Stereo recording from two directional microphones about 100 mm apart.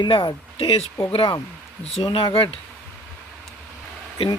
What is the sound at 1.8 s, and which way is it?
Speech, 75° left (ahead or behind).